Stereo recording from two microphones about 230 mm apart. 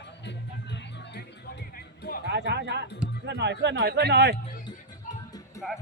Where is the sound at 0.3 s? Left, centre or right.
Left.